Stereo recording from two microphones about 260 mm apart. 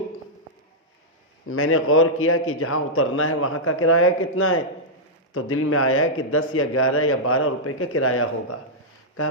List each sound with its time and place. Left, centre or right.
1.5 s a man's voice: left